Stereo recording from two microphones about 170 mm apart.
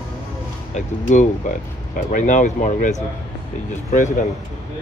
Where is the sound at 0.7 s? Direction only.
45° left (ahead or behind).